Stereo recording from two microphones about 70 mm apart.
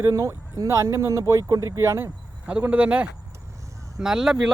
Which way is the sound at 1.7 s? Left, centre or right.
Right.